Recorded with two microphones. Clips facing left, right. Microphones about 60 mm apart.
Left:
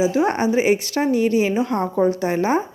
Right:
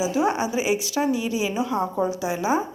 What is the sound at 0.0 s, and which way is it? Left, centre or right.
Speech, left.